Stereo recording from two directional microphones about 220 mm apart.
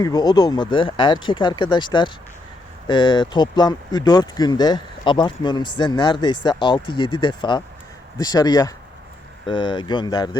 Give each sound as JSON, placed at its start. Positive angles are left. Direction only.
{"t": 0.0, "sound": "speech", "side_deg": 15}